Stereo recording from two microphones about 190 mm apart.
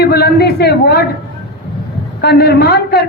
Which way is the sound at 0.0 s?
55° left (ahead or behind).